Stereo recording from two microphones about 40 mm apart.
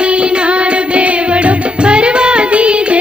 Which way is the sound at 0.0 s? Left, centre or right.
Right.